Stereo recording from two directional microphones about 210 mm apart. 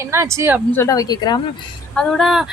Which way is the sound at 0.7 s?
15° left (ahead or behind).